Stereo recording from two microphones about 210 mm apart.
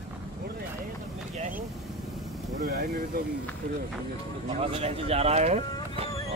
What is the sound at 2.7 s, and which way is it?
Speech, 45° right (ahead or behind).